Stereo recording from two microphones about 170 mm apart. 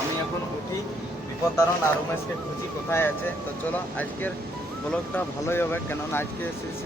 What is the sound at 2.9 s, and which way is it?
Speech, 15° left (ahead or behind).